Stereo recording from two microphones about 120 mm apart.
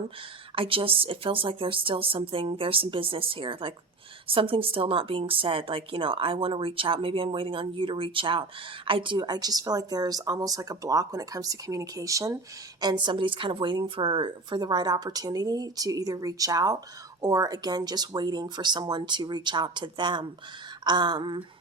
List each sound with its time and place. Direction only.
0.5 s speech: 50° right (ahead or behind); by 12.4 s 25° right (ahead or behind)
12.8 s a woman's voice: 35° right (ahead or behind)